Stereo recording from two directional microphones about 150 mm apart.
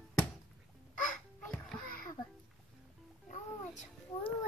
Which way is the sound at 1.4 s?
5° left (ahead or behind).